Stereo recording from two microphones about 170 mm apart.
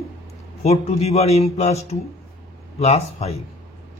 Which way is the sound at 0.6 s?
40° left (ahead or behind).